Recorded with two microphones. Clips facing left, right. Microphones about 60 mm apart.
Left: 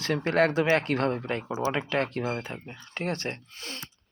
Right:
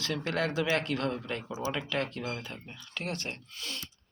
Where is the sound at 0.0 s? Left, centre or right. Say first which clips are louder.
Left 7 dB; left.